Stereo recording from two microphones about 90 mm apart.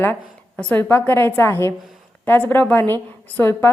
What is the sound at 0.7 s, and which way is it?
A woman's voice, 25° left (ahead or behind).